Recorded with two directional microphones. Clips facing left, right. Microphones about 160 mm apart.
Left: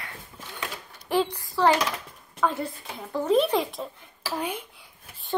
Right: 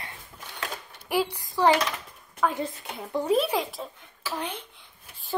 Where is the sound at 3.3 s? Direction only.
5° right (ahead or behind).